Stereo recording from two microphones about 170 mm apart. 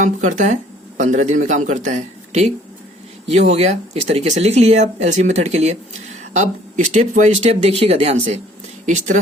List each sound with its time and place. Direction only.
0.0 s a man's voice: 45° right (ahead or behind)